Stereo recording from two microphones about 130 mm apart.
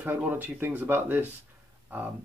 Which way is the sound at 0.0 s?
15° right (ahead or behind).